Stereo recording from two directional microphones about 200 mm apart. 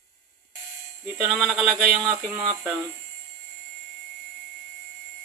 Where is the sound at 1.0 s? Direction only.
Centre (ahead or behind).